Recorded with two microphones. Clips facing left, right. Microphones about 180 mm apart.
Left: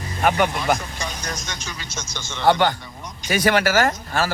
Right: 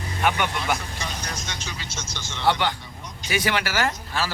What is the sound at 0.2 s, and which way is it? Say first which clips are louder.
A man's voice: left 5 dB; 40° left (ahead or behind).